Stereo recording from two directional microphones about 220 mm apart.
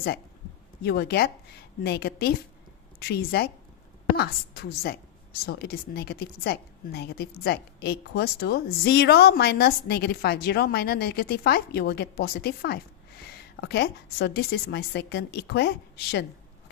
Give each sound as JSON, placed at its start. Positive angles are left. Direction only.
{"t": 0.8, "sound": "a woman's voice", "side_deg": 50}